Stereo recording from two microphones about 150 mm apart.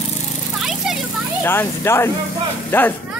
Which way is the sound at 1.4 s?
15° left (ahead or behind).